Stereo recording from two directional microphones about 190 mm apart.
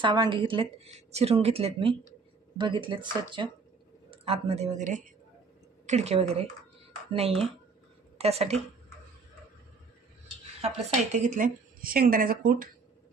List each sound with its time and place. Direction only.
0.0 s a woman's voice: 25° right (ahead or behind)
10.6 s speech: 35° right (ahead or behind)